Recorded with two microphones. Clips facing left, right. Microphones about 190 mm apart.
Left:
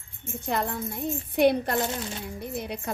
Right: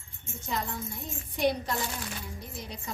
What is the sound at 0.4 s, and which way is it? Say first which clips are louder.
Speech: left 6 dB; 60° left (ahead or behind).